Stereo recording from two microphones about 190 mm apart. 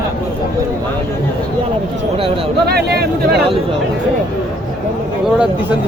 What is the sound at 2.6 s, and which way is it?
Speech, 60° right (ahead or behind).